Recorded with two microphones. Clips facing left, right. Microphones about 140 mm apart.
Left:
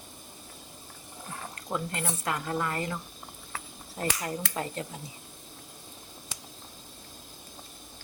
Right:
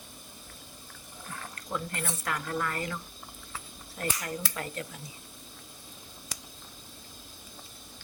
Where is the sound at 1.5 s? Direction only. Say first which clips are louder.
Left 2 dB; 25° left (ahead or behind).